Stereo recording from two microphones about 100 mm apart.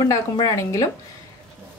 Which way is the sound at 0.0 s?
40° left (ahead or behind).